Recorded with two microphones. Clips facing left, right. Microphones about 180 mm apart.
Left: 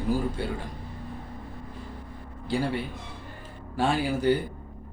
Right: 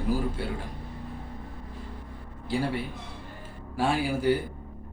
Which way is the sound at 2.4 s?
5° right (ahead or behind).